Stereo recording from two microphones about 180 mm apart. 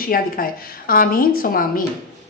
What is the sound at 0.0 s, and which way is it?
A woman's voice, 55° left (ahead or behind).